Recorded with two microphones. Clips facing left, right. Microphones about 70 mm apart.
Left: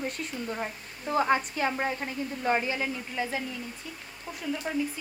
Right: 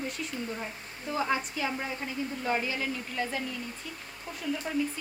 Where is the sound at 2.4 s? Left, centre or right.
Left.